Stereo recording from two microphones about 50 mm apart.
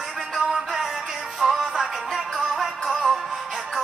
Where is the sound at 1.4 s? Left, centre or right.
Centre.